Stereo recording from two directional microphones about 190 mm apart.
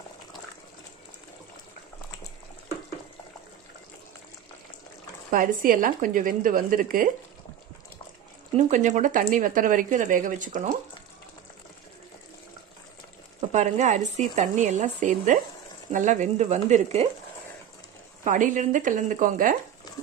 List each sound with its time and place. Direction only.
5.3 s speech: 45° right (ahead or behind)
8.5 s speech: 40° right (ahead or behind)
13.5 s speech: 40° right (ahead or behind)
18.2 s speech: 40° right (ahead or behind)